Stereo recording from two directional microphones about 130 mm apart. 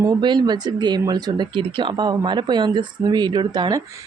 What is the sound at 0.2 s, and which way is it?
Speech, 35° right (ahead or behind).